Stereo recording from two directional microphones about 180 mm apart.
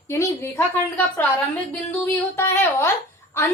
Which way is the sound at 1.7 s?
15° left (ahead or behind).